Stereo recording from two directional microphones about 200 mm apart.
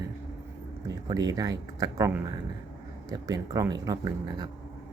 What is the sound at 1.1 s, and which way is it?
Speech, 20° right (ahead or behind).